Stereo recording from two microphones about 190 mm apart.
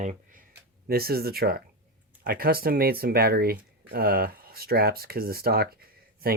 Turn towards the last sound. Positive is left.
turn(degrees=-50)  # may be behind; listen again after turning